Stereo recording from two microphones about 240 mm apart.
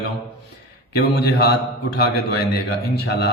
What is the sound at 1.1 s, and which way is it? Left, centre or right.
Speech, left.